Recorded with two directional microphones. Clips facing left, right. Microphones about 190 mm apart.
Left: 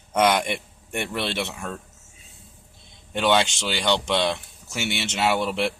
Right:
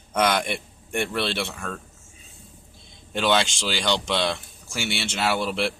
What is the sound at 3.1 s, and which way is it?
Speech, 15° left (ahead or behind).